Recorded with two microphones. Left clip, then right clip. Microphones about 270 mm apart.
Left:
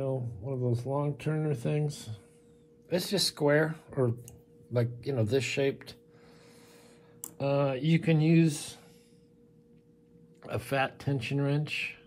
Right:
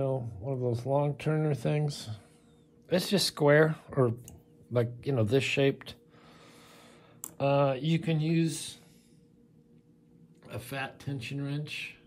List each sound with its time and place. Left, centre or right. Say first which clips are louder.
0.4 s speech: right 1 dB; right
7.3 s speech: right 2 dB; centre
10.4 s speech: left 7 dB; centre